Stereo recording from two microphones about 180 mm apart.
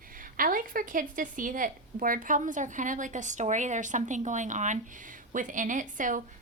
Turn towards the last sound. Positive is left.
turn(degrees=-45)  # may be behind; listen again after turning